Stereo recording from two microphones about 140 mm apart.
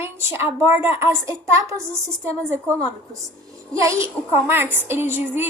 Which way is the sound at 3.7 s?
20° right (ahead or behind).